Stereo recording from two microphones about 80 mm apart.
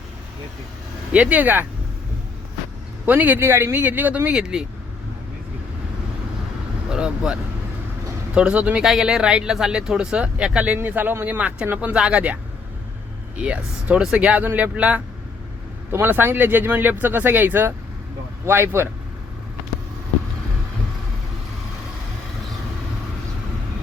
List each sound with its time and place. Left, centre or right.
1.1 s speech: centre
3.1 s speech: right
6.9 s speech: centre
8.4 s speech: centre
10.8 s speech: right
11.9 s speech: centre; by 18.9 s right